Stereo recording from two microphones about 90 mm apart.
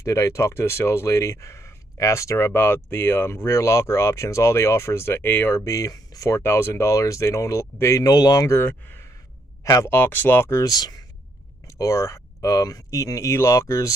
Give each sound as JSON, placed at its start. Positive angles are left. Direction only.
{"t": 0.0, "sound": "speech", "side_deg": 35}
{"t": 8.5, "sound": "speech", "side_deg": 20}
{"t": 9.6, "sound": "speech", "side_deg": 35}
{"t": 9.9, "sound": "speech", "side_deg": 20}
{"t": 10.6, "sound": "speech", "side_deg": 45}
{"t": 11.8, "sound": "speech", "side_deg": 35}